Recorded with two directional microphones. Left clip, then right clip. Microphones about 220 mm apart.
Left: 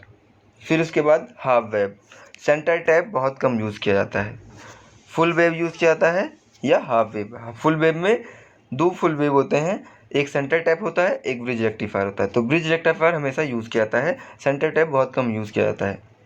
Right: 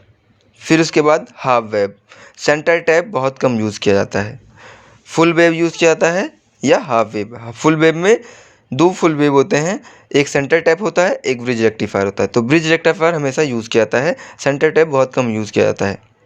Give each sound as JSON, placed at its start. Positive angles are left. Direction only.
{"t": 0.6, "sound": "speech", "side_deg": -40}